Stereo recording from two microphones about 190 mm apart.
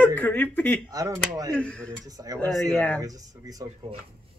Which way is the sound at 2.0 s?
20° right (ahead or behind).